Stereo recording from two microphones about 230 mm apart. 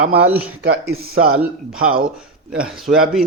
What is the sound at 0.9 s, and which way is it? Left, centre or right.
Speech, right.